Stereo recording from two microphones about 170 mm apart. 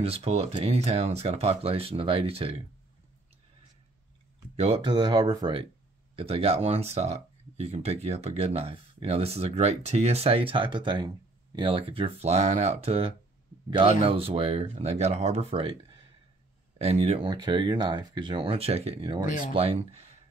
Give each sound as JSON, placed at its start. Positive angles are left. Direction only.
{"t": 0.0, "sound": "speech", "side_deg": -35}
{"t": 4.6, "sound": "speech", "side_deg": -35}